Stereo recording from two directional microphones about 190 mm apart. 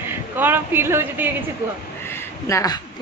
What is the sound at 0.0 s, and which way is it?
A woman's voice, 10° right (ahead or behind).